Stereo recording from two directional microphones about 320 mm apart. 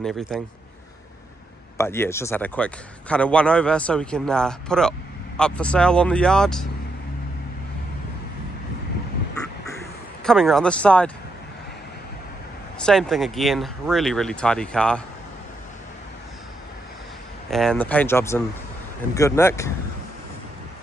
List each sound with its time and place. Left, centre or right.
0.0 s a man's voice: centre
1.8 s a man's voice: centre
10.2 s a man's voice: centre
12.7 s a man's voice: centre
17.5 s a man's voice: centre